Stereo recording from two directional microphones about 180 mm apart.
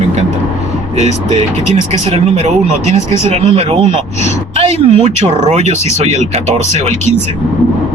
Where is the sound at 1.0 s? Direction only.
40° right (ahead or behind).